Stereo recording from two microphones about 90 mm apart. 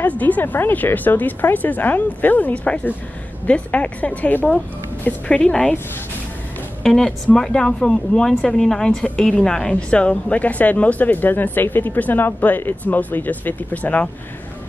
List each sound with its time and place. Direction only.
0.0 s a woman's voice: 20° left (ahead or behind)
6.8 s speech: 5° left (ahead or behind)